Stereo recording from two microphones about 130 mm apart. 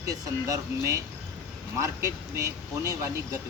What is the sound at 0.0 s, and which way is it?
Speech, 25° right (ahead or behind).